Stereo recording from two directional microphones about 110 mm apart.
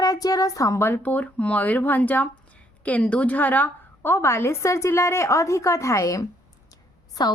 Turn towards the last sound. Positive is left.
turn(degrees=40)  # may be behind; listen again after turning